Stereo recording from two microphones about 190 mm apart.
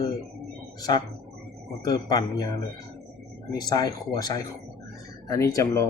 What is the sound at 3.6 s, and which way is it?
Speech, 20° left (ahead or behind).